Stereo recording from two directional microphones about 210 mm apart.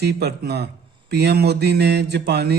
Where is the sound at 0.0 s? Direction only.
50° right (ahead or behind).